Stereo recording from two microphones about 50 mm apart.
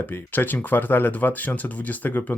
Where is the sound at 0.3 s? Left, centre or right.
Left.